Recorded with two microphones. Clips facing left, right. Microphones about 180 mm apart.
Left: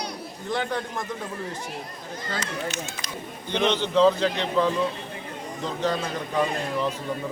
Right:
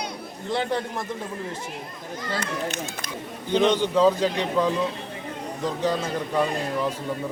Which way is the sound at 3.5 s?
10° right (ahead or behind).